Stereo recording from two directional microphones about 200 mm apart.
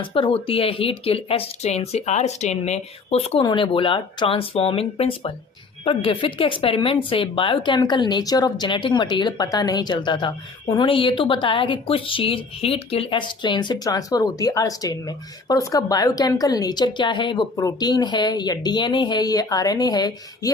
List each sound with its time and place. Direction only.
0.1 s speech: 25° left (ahead or behind)